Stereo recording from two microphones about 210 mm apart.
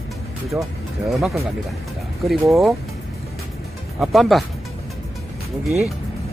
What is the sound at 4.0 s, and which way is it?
Speech, centre (ahead or behind).